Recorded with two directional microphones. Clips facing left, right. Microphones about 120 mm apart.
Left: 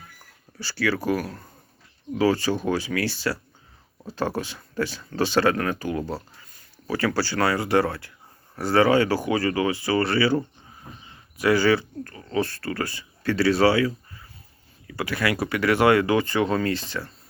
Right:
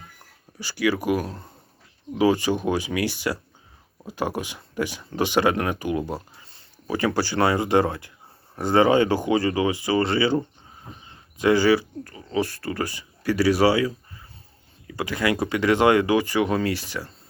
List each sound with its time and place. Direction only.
0.6 s speech: 15° right (ahead or behind)